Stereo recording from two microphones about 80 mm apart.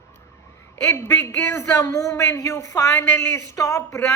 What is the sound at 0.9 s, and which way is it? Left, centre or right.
Speech, left.